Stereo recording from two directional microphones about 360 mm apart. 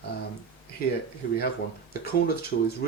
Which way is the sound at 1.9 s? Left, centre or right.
Left.